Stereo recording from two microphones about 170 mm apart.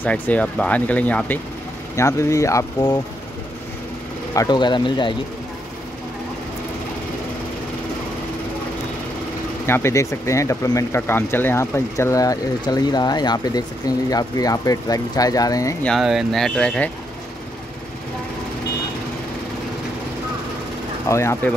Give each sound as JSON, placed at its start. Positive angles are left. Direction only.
{"t": 0.0, "sound": "speech", "side_deg": 10}
{"t": 4.3, "sound": "speech", "side_deg": 20}
{"t": 9.7, "sound": "speech", "side_deg": 15}
{"t": 15.8, "sound": "speech", "side_deg": 0}
{"t": 21.1, "sound": "speech", "side_deg": 15}